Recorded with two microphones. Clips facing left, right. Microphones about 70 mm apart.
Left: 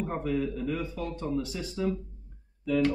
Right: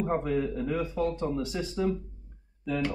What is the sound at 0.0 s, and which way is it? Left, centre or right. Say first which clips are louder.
Speech: right 2 dB; centre.